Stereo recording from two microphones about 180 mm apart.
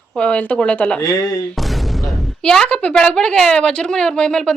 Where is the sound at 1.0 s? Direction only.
20° left (ahead or behind).